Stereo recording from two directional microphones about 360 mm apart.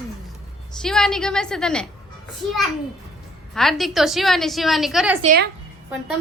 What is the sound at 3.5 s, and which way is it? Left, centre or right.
A child's voice, centre.